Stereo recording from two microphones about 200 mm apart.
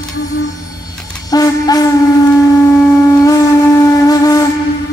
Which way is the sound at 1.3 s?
20° left (ahead or behind).